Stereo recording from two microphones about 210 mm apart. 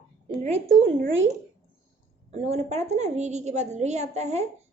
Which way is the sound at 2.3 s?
30° right (ahead or behind).